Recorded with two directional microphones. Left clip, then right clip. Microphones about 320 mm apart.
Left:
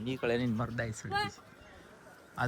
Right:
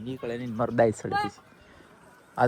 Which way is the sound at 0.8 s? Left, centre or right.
Centre.